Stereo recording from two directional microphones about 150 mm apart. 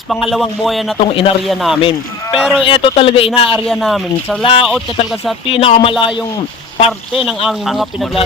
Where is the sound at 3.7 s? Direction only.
Centre (ahead or behind).